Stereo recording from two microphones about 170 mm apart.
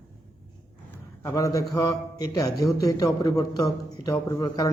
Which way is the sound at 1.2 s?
20° left (ahead or behind).